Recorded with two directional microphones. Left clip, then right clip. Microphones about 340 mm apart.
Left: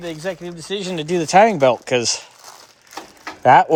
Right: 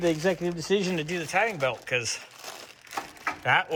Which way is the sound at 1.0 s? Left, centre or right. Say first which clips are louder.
Left 13 dB; centre.